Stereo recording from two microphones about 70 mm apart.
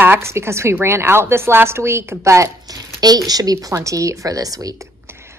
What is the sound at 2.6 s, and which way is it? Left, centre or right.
Speech, right.